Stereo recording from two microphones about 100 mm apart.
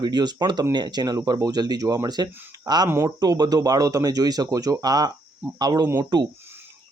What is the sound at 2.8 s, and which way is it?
Speech, 25° right (ahead or behind).